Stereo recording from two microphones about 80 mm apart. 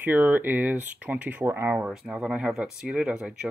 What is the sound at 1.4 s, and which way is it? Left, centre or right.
Speech, right.